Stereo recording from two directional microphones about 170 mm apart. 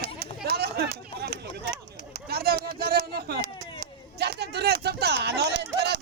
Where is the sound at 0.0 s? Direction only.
70° right (ahead or behind).